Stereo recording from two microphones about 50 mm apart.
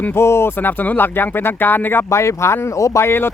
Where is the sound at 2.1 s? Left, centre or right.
Left.